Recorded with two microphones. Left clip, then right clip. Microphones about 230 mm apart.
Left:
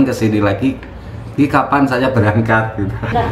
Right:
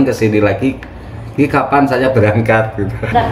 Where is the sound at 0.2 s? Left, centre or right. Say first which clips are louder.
Right 4 dB; centre.